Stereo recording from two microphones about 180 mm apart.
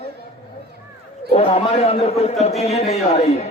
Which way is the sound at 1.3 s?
35° left (ahead or behind).